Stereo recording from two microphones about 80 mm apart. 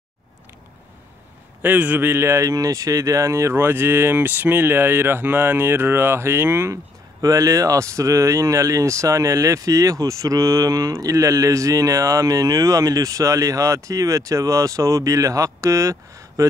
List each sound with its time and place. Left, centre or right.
1.6 s speech: right
7.2 s speech: right